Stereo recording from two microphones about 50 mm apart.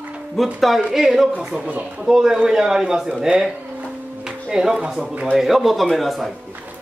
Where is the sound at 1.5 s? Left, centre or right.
Right.